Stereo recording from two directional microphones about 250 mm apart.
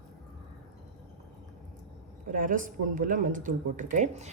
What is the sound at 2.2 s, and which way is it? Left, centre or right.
Speech, right.